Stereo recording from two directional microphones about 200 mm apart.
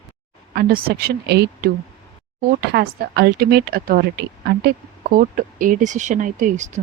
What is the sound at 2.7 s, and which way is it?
A woman's voice, 50° right (ahead or behind).